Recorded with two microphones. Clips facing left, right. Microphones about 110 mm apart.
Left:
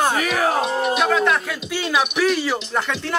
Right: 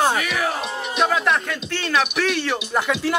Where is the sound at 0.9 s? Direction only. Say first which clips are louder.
Right 2 dB; centre (ahead or behind).